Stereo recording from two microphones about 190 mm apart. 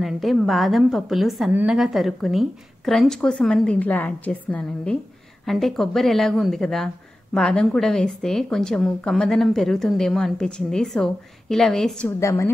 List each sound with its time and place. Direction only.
0.0 s a woman's voice: centre (ahead or behind)
12.2 s a woman's voice: 15° left (ahead or behind)